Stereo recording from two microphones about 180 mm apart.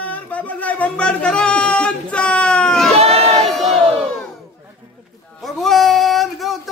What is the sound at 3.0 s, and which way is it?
Crowd, 35° right (ahead or behind).